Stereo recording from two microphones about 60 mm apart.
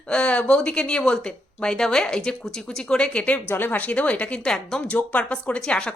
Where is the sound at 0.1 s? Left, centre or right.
Centre.